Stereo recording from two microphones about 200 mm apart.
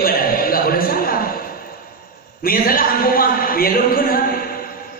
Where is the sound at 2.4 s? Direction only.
45° left (ahead or behind).